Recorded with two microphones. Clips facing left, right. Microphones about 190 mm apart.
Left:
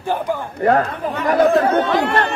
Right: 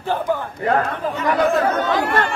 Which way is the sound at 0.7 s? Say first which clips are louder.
Left 3 dB; 60° left (ahead or behind).